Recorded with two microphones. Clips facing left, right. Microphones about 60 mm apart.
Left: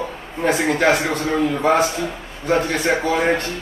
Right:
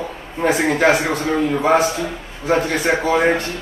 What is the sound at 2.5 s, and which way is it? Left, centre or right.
Speech, centre.